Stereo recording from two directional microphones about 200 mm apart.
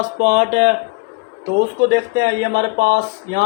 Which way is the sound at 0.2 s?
35° right (ahead or behind).